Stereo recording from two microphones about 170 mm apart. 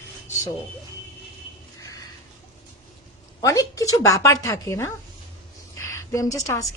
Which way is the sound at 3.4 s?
20° left (ahead or behind).